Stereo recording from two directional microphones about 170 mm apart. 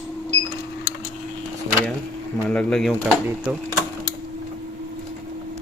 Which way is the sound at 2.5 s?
5° left (ahead or behind).